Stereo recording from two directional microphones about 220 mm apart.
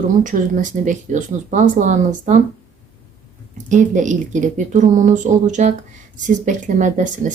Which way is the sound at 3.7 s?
35° right (ahead or behind).